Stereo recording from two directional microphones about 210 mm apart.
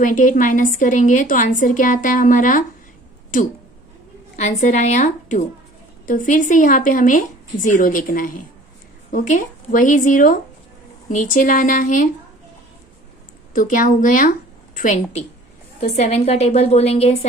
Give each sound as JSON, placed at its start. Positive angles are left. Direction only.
{"t": 0.0, "sound": "a woman's voice", "side_deg": 40}
{"t": 4.4, "sound": "a woman's voice", "side_deg": 35}
{"t": 13.5, "sound": "a woman's voice", "side_deg": 40}